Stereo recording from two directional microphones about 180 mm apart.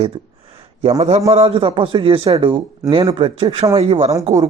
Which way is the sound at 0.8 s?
35° right (ahead or behind).